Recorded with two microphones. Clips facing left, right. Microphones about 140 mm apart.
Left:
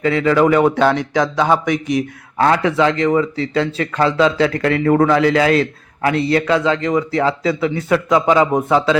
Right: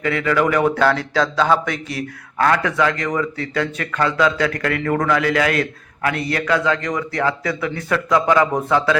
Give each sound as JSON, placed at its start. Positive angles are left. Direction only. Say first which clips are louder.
{"t": 0.0, "sound": "a man's voice", "louder": "left 5 dB", "side_deg": 25}